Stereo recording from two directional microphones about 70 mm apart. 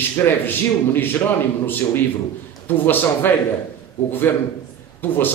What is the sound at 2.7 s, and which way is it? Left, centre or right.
A man's voice, left.